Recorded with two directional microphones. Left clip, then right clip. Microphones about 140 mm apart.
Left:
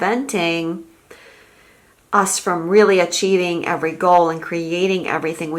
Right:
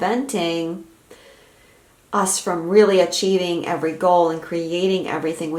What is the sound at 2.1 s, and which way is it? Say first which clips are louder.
Speech: left 4 dB; 35° left (ahead or behind).